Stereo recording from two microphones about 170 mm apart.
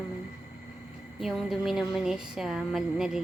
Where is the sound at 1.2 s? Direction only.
Centre (ahead or behind).